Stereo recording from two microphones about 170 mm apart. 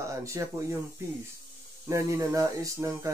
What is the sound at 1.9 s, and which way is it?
Speech, 20° right (ahead or behind).